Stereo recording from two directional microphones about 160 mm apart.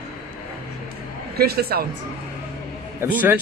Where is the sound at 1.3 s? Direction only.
75° right (ahead or behind).